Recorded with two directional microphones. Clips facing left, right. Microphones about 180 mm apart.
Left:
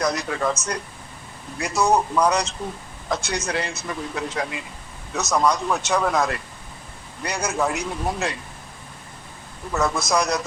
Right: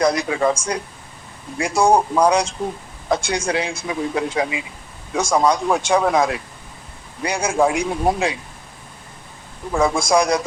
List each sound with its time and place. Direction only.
0.0 s speech: 10° right (ahead or behind)
1.7 s speech: 30° right (ahead or behind)
2.1 s speech: 10° right (ahead or behind)
9.7 s speech: 10° right (ahead or behind)